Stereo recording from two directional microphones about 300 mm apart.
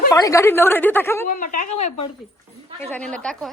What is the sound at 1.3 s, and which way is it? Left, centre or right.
Speech, left.